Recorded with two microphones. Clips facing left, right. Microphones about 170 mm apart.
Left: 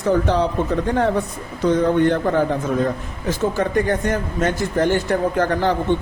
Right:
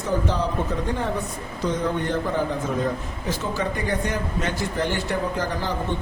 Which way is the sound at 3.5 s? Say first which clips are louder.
Left 6 dB; 50° left (ahead or behind).